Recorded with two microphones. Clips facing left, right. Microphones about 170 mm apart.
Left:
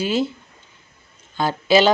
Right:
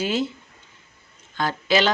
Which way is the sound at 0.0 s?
10° left (ahead or behind).